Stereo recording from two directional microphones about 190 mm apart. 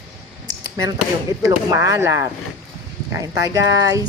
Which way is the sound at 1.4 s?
15° right (ahead or behind).